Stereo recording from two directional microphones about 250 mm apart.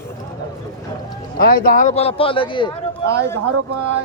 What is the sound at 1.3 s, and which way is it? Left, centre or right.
A man's voice, left.